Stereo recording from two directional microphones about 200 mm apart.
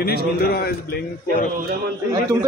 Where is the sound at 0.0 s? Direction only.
50° left (ahead or behind).